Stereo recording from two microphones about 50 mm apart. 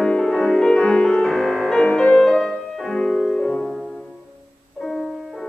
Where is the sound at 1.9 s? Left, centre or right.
Left.